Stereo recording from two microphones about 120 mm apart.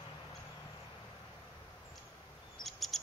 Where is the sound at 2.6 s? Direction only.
Centre (ahead or behind).